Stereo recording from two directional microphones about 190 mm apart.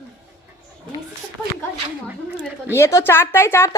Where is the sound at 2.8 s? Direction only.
15° left (ahead or behind).